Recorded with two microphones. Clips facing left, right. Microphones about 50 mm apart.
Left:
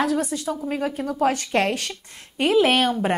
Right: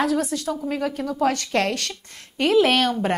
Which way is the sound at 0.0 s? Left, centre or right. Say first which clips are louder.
Right 1 dB; centre.